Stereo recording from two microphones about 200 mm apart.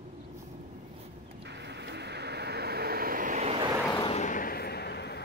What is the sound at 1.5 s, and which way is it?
Vehicle, 60° right (ahead or behind).